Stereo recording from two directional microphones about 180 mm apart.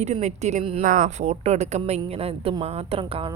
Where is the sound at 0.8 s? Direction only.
50° right (ahead or behind).